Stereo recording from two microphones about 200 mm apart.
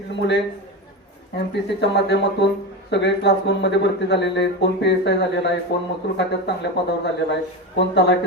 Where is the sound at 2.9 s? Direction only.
60° left (ahead or behind).